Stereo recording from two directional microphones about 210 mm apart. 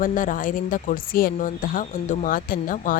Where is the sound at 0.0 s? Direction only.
40° left (ahead or behind).